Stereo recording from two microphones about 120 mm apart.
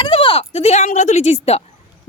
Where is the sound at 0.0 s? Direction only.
45° left (ahead or behind).